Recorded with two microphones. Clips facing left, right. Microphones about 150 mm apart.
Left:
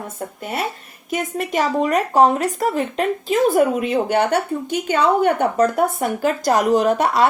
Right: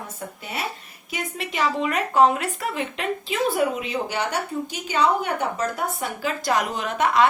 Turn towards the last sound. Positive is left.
turn(degrees=40)  # may be behind; listen again after turning